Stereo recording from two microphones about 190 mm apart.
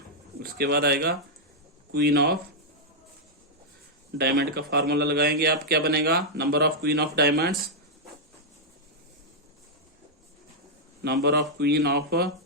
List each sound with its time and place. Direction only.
0.3 s speech: 60° right (ahead or behind)
4.2 s speech: 60° right (ahead or behind)
11.0 s speech: 60° right (ahead or behind)